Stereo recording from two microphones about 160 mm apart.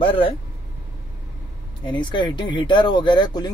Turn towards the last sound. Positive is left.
turn(degrees=30)  # may be behind; listen again after turning